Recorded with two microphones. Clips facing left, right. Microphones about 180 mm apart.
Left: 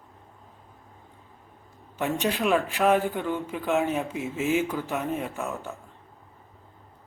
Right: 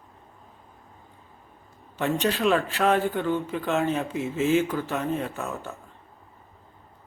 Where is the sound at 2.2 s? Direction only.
15° left (ahead or behind).